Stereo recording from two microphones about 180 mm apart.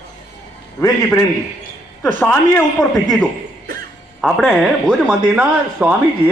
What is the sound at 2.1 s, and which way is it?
Speech, 10° left (ahead or behind).